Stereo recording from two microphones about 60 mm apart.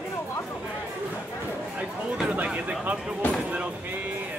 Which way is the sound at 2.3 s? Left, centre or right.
Centre.